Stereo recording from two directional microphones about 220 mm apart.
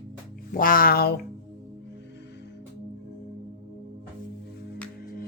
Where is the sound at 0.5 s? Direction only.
40° left (ahead or behind).